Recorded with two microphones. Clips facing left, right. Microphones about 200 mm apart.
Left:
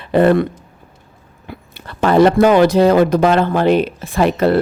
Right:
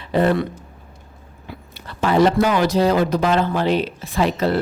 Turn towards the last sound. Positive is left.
turn(degrees=55)  # may be behind; listen again after turning